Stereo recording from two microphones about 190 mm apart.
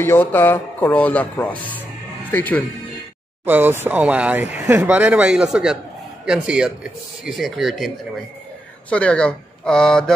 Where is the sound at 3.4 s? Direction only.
10° right (ahead or behind).